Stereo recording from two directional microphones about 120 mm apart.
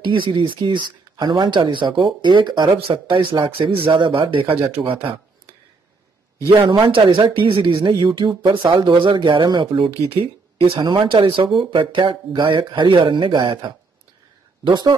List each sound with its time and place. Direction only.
0.0 s speech: 45° right (ahead or behind)
6.7 s speech: 45° right (ahead or behind)